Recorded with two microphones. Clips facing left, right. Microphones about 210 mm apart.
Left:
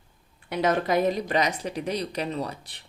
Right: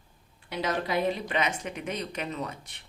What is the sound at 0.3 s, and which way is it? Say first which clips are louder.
A woman's voice: left 6 dB; 50° left (ahead or behind).